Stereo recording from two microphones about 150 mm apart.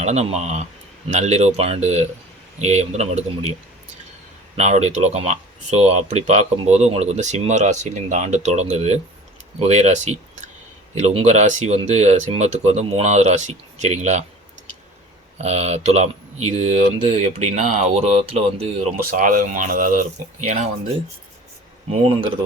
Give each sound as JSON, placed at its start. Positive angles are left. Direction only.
{"t": 0.0, "sound": "speech", "side_deg": -50}
{"t": 4.5, "sound": "speech", "side_deg": -50}
{"t": 15.4, "sound": "speech", "side_deg": -45}
{"t": 19.1, "sound": "speech", "side_deg": -65}